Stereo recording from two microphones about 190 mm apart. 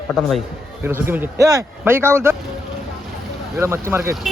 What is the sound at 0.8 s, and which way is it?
A man's voice, 10° right (ahead or behind).